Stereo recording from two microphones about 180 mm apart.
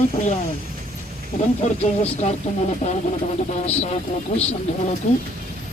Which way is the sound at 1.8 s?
35° left (ahead or behind).